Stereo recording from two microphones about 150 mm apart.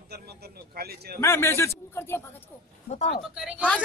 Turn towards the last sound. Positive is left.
turn(degrees=-5)  # may be behind; listen again after turning